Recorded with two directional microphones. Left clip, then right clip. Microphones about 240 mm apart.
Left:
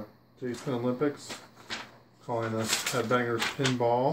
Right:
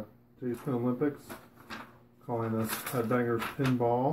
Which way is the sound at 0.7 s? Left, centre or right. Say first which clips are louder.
Left 2 dB; centre.